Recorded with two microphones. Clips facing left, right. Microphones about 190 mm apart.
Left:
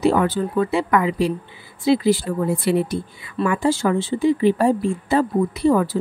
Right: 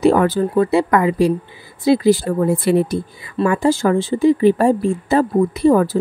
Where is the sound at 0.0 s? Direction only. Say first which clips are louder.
Right 4 dB; 45° right (ahead or behind).